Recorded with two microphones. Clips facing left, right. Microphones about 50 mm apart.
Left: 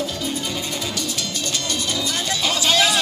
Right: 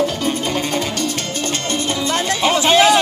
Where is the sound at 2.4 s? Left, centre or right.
Right.